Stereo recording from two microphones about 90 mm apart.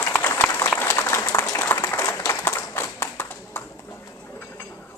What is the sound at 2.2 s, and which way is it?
Clapping, 35° left (ahead or behind).